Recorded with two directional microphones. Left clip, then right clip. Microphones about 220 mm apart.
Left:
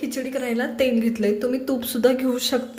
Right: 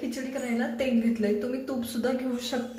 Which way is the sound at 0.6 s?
45° left (ahead or behind).